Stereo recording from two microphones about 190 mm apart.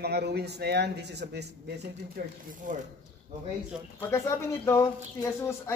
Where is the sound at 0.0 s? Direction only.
60° right (ahead or behind).